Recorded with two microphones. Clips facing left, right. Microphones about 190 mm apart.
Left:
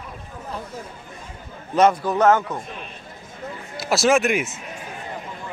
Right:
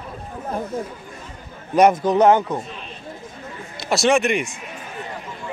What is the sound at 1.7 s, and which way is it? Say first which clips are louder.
Speech: right 3 dB; 15° right (ahead or behind).